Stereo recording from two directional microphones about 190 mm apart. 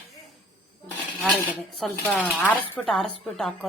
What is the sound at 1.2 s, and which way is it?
A woman's voice, 5° left (ahead or behind).